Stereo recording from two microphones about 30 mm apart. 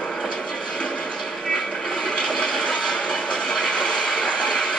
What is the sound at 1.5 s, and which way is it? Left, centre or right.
Television, left.